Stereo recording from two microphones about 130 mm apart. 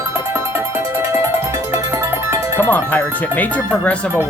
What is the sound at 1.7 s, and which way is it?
Music, 20° right (ahead or behind).